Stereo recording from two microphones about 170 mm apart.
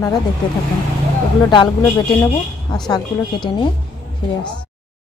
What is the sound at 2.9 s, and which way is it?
Speech, 25° left (ahead or behind).